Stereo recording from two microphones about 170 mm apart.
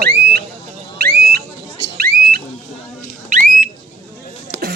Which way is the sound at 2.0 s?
60° right (ahead or behind).